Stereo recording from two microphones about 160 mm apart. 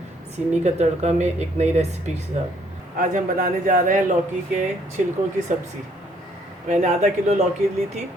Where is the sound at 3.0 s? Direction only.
60° right (ahead or behind).